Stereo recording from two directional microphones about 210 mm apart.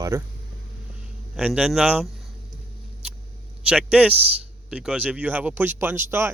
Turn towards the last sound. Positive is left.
turn(degrees=-10)  # may be behind; listen again after turning